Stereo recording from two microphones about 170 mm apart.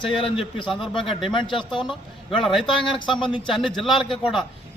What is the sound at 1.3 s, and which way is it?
Speech, 30° left (ahead or behind).